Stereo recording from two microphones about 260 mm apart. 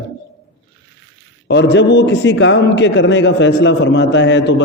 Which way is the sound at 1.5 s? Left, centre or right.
Left.